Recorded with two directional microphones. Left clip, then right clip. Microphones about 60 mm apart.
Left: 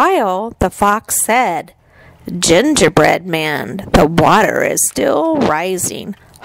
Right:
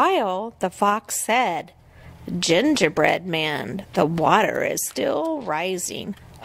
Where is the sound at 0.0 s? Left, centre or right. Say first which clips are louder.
Left 7 dB; left.